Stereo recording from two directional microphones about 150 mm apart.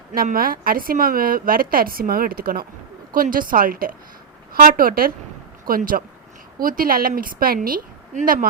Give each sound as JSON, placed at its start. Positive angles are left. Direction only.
{"t": 0.1, "sound": "a woman's voice", "side_deg": -75}